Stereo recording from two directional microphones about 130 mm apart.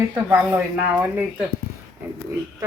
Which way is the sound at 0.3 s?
10° right (ahead or behind).